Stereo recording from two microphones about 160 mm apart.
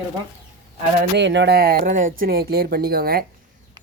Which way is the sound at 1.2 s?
90° right.